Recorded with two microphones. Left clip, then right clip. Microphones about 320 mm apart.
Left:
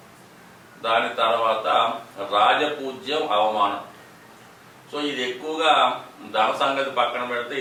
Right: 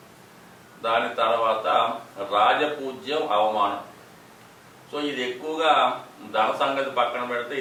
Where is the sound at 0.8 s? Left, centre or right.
Centre.